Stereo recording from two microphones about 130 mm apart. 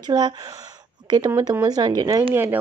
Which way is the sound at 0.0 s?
30° right (ahead or behind).